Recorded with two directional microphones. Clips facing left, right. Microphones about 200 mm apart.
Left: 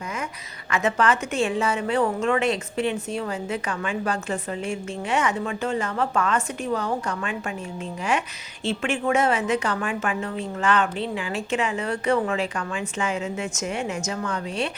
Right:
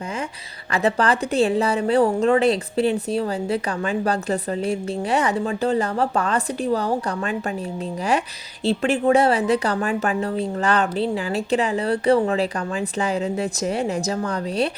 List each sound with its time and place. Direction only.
0.7 s a woman's voice: 35° right (ahead or behind)